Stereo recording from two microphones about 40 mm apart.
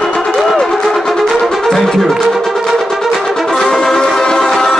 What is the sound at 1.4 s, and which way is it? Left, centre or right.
Music, centre.